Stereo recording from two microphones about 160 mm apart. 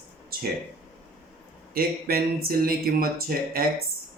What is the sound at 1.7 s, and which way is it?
Speech, 70° right (ahead or behind).